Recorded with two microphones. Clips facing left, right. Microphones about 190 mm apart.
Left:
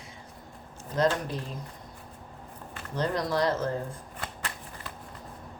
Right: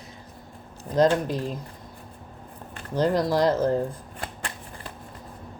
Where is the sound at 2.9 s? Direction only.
30° right (ahead or behind).